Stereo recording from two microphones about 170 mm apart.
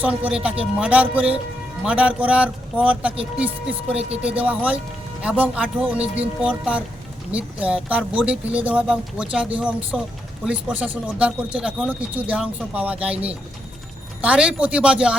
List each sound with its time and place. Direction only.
0.0 s speech: 10° right (ahead or behind)
3.9 s speech: 35° right (ahead or behind)
4.3 s speech: 10° right (ahead or behind)